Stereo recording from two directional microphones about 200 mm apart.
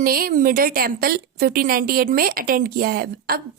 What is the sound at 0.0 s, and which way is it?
A woman's voice, 45° right (ahead or behind).